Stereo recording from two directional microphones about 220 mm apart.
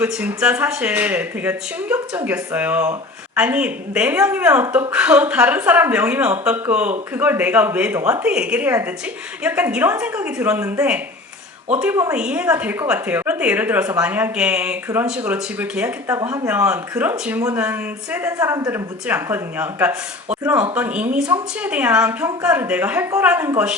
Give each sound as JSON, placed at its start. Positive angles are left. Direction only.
{"t": 0.0, "sound": "a woman's voice", "side_deg": -10}